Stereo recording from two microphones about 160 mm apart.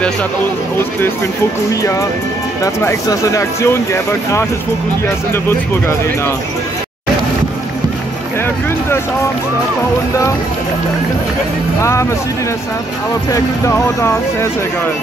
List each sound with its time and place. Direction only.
1.7 s speech: 20° left (ahead or behind)
11.8 s speech: 15° left (ahead or behind)
13.3 s speech: 20° left (ahead or behind)